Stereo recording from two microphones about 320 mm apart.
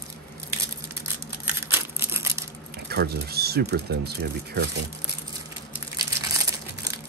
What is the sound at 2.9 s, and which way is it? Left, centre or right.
Speech, right.